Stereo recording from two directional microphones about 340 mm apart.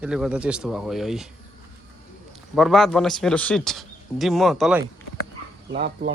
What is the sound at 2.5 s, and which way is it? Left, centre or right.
A man's voice, centre.